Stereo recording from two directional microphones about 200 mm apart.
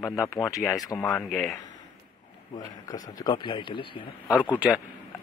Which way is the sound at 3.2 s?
25° left (ahead or behind).